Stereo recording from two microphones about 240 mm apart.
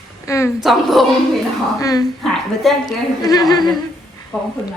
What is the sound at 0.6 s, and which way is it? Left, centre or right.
Speech, centre.